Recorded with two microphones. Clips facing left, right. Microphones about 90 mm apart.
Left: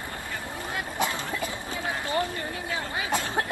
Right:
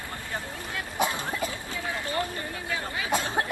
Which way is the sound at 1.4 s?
20° left (ahead or behind).